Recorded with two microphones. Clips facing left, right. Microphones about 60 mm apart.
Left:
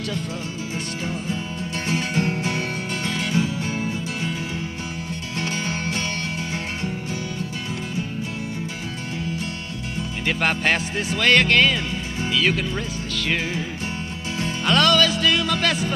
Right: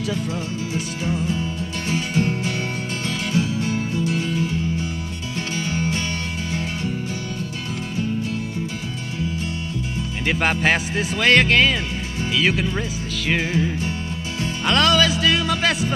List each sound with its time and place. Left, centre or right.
1.9 s music: left
3.3 s music: centre
5.4 s music: left
10.2 s speech: centre
14.7 s speech: centre